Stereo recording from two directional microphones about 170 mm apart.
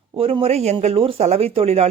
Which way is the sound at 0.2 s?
35° right (ahead or behind).